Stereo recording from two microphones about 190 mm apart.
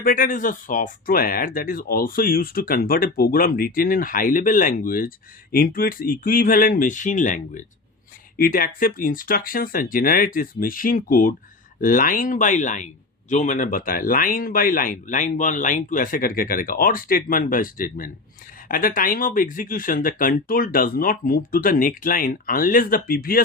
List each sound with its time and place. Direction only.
0.0 s speech: 45° left (ahead or behind)